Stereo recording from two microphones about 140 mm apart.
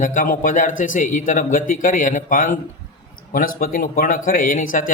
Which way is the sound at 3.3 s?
85° left.